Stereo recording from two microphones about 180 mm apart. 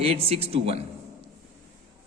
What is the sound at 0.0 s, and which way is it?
Speech, 30° right (ahead or behind).